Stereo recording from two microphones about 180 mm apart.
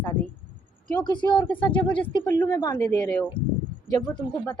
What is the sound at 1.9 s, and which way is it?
A woman's voice, 25° left (ahead or behind).